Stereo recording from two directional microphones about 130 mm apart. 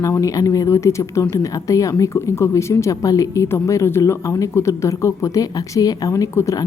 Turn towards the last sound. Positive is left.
turn(degrees=25)  # may be behind; listen again after turning